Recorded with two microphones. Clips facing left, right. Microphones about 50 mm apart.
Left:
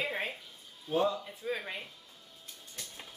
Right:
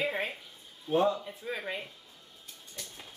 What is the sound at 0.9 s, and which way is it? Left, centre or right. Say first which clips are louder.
Speech: right 3 dB; right.